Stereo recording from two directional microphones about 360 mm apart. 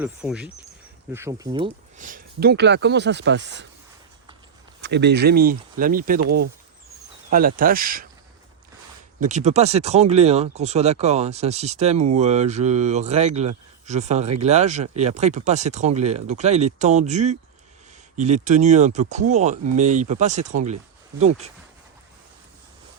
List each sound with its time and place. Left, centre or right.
0.0 s speech: centre; by 3.7 s right
4.8 s speech: right
7.3 s speech: right
9.2 s speech: centre
18.4 s speech: centre